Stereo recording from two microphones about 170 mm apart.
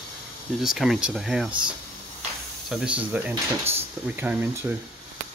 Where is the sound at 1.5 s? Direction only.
30° right (ahead or behind).